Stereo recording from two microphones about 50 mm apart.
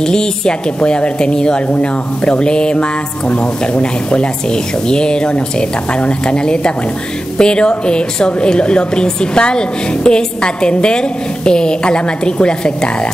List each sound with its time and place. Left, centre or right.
0.0 s a woman's voice: centre